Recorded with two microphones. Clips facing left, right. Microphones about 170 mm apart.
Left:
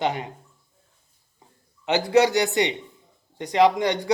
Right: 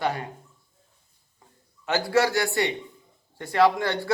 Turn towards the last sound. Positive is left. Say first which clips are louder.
# left 2 dB
turn(degrees=15)  # may be behind; listen again after turning